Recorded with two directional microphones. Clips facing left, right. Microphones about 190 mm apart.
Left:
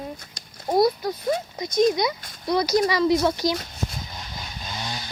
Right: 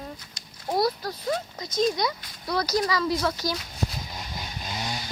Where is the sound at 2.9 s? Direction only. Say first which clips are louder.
Left 5 dB; 25° left (ahead or behind).